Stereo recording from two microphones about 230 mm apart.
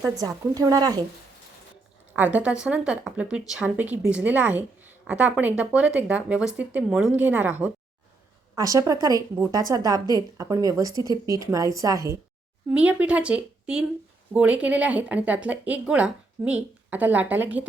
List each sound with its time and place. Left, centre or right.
0.2 s a woman's voice: centre
2.1 s a woman's voice: centre